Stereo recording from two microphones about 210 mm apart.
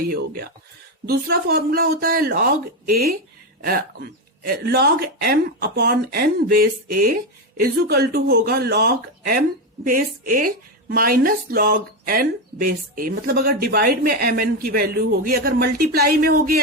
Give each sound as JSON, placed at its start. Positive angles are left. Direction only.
{"t": 0.0, "sound": "a woman's voice", "side_deg": -45}
{"t": 4.4, "sound": "a woman's voice", "side_deg": -45}